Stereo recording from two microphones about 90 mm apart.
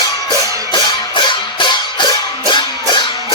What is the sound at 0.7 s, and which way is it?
Music, 60° left (ahead or behind).